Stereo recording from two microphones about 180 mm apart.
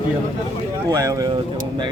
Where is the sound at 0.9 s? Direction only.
20° right (ahead or behind).